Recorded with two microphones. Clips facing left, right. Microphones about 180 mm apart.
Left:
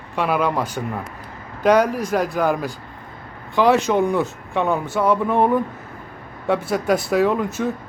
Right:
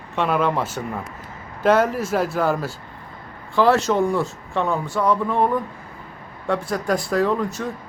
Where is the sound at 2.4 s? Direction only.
15° left (ahead or behind).